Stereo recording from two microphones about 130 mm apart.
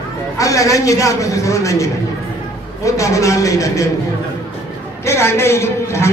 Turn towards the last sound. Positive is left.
turn(degrees=20)  # may be behind; listen again after turning